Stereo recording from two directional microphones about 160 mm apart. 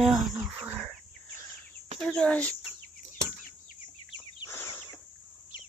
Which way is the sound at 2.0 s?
5° left (ahead or behind).